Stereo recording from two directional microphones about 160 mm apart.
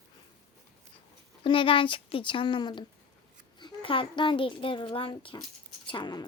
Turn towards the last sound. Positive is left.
turn(degrees=25)  # may be behind; listen again after turning